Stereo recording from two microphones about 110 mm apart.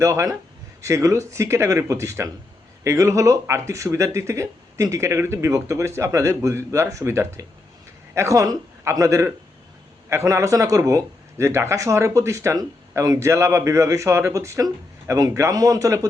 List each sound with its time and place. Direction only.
0.0 s a man's voice: 25° right (ahead or behind)